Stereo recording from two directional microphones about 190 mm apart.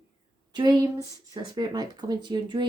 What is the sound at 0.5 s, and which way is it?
Speech, 25° right (ahead or behind).